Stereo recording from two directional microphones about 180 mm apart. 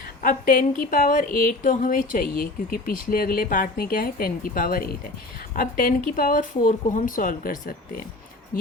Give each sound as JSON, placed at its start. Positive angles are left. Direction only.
{"t": 0.2, "sound": "speech", "side_deg": 50}